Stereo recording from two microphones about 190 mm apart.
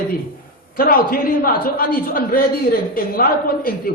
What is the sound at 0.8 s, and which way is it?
A man's voice, 50° left (ahead or behind).